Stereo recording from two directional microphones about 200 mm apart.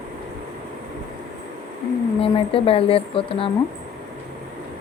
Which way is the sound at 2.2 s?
30° left (ahead or behind).